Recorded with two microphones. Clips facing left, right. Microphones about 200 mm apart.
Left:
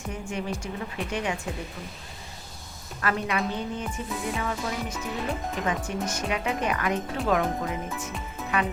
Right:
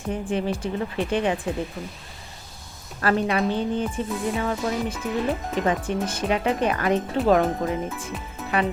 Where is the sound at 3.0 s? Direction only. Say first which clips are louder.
Right 6 dB; 35° right (ahead or behind).